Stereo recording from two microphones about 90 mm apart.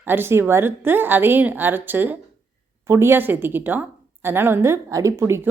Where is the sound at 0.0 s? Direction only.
25° right (ahead or behind).